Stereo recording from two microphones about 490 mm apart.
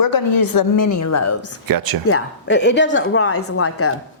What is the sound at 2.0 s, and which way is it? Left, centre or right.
A woman's voice, left.